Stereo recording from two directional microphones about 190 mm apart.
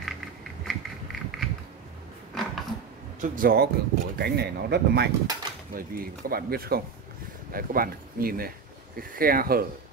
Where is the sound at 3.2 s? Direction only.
45° right (ahead or behind).